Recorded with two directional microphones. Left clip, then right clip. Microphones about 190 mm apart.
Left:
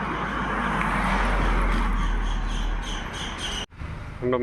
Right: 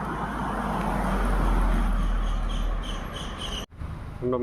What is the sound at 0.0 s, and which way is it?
Vehicle, 15° right (ahead or behind).